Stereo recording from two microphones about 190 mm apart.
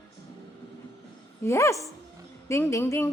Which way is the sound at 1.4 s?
15° left (ahead or behind).